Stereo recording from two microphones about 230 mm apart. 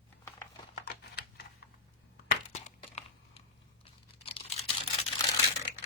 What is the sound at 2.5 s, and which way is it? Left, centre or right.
Crumpling, left.